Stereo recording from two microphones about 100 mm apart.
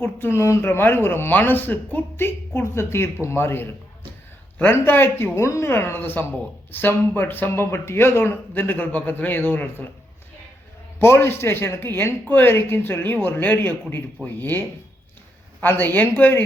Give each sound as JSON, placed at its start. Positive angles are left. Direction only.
{"t": 0.0, "sound": "speech", "side_deg": 25}
{"t": 11.0, "sound": "speech", "side_deg": 25}
{"t": 15.6, "sound": "speech", "side_deg": 20}